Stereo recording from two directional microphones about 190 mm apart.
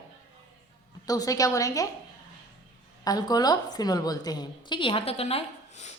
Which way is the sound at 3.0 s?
20° left (ahead or behind).